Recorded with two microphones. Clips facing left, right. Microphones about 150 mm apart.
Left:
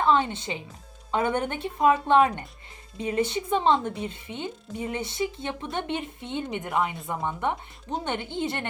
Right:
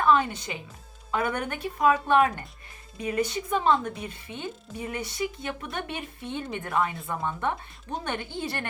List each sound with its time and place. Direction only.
0.0 s speech: 25° left (ahead or behind)